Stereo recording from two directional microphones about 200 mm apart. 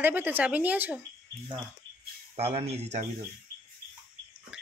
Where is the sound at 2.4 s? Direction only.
30° right (ahead or behind).